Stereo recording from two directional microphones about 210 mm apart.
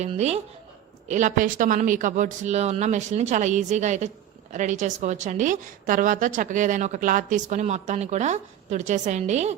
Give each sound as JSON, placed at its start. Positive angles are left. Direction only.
{"t": 0.0, "sound": "a woman's voice", "side_deg": -30}